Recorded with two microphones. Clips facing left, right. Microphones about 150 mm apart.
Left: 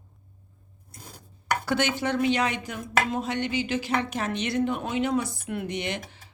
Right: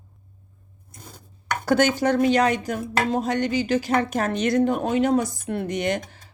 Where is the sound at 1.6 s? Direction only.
45° right (ahead or behind).